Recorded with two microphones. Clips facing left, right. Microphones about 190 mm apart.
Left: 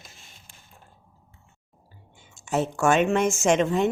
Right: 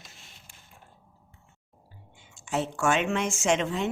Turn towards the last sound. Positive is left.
turn(degrees=50)  # may be behind; listen again after turning